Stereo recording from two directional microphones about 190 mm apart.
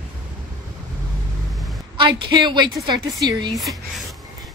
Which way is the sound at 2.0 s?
25° right (ahead or behind).